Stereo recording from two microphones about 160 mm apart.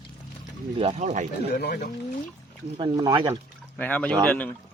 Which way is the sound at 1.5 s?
70° left (ahead or behind).